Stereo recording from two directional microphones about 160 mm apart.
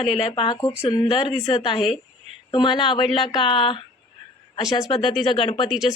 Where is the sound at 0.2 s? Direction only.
35° left (ahead or behind).